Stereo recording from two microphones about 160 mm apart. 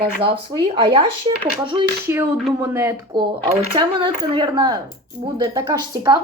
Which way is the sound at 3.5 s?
30° right (ahead or behind).